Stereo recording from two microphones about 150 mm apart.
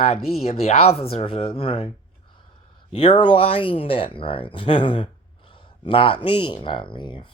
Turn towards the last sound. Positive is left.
turn(degrees=30)  # may be behind; listen again after turning